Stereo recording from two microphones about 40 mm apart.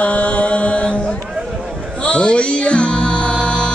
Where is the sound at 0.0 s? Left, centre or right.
Left.